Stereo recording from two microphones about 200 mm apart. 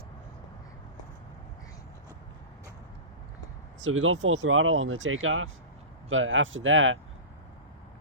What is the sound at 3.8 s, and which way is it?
Speech, 80° right.